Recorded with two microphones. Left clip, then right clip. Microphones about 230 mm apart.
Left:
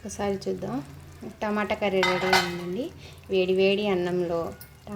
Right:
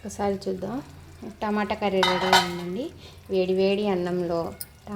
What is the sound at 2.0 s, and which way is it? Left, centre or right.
Stir, right.